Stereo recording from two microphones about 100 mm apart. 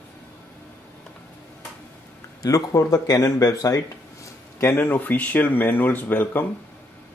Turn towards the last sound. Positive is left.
turn(degrees=20)  # may be behind; listen again after turning